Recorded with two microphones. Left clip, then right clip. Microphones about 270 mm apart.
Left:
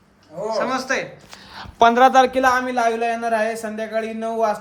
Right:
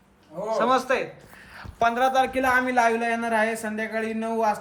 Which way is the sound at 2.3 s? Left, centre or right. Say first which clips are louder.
Left 6 dB; centre.